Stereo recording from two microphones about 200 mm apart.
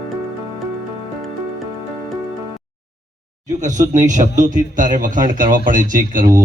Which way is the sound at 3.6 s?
40° right (ahead or behind).